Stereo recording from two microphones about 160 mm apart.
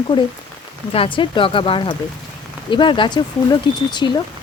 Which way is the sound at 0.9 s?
35° left (ahead or behind).